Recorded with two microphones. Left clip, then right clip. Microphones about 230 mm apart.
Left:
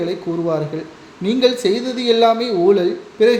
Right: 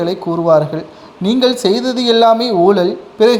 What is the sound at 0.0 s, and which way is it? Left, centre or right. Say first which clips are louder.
A man's voice: right 5 dB; right.